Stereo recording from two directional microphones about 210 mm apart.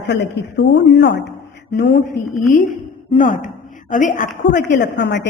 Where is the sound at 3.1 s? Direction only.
40° left (ahead or behind).